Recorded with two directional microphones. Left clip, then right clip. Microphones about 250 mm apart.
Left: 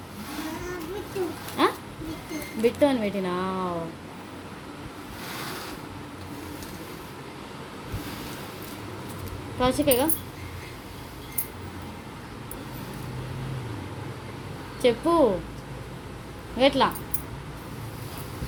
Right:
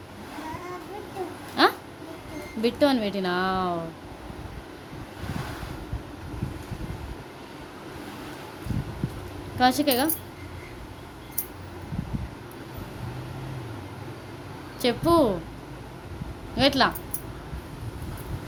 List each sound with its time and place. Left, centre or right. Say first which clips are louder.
1.6 s a sound: right 3 dB; right
2.6 s speech: even; right
9.6 s speech: right 1 dB; right
14.8 s speech: left 1 dB; right
16.6 s speech: even; right